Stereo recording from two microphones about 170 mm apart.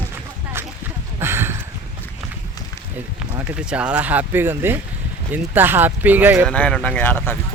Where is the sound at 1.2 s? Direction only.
15° right (ahead or behind).